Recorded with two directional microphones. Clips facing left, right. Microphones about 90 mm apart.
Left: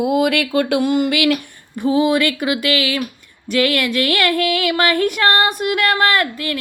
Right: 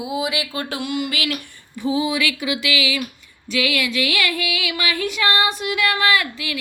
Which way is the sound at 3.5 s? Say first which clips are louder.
Left 5 dB; 50° left (ahead or behind).